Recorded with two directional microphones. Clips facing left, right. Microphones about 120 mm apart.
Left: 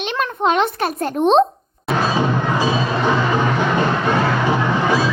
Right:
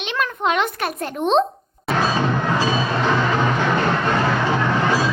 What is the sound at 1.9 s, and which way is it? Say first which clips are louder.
Music: left 2 dB; 5° left (ahead or behind).